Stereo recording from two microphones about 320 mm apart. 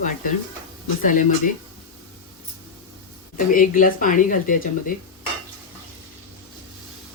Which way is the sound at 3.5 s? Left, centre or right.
Left.